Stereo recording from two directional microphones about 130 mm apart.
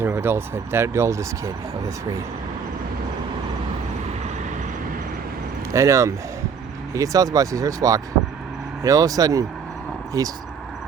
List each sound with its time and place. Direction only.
0.0 s speech: 15° right (ahead or behind)
5.7 s speech: 25° right (ahead or behind)